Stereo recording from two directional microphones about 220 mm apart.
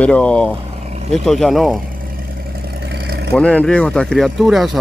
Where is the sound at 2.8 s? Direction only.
45° right (ahead or behind).